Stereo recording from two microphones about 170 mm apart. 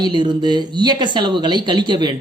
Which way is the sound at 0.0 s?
25° right (ahead or behind).